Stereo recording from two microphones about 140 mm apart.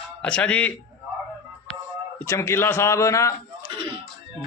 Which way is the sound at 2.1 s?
20° left (ahead or behind).